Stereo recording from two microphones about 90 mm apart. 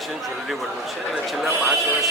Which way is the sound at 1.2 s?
Centre (ahead or behind).